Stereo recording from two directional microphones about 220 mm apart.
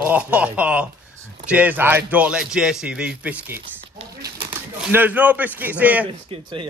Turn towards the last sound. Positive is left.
turn(degrees=-25)  # may be behind; listen again after turning